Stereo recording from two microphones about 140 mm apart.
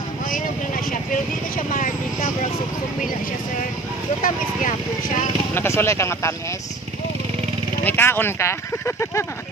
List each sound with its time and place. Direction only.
1.7 s speech: 70° left (ahead or behind)
4.2 s speech: 65° left (ahead or behind)
5.5 s speech: 15° left (ahead or behind)
7.8 s speech: 15° left (ahead or behind)